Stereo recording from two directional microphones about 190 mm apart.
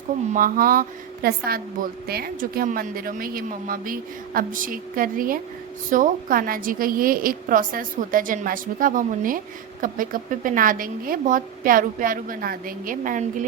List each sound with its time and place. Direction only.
0.3 s a woman's voice: 50° right (ahead or behind)